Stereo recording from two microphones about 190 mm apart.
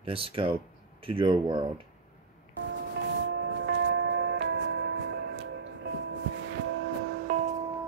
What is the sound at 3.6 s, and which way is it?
Music, 65° right (ahead or behind).